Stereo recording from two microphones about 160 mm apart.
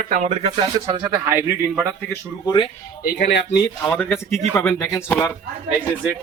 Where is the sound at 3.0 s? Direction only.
85° left.